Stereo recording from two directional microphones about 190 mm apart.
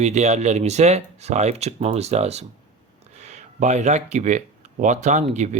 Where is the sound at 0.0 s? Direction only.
35° right (ahead or behind).